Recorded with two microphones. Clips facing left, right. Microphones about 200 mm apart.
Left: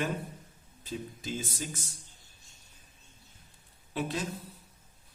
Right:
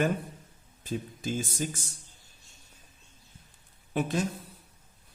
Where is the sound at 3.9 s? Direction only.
50° right (ahead or behind).